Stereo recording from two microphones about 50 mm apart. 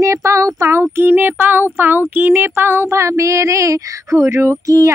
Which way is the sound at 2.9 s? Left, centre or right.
Right.